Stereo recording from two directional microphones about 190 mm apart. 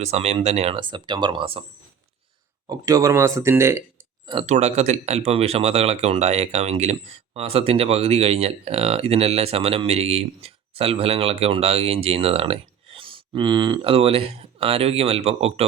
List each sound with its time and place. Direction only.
0.0 s speech: 35° right (ahead or behind)
2.6 s speech: 20° right (ahead or behind)
4.4 s speech: 35° right (ahead or behind)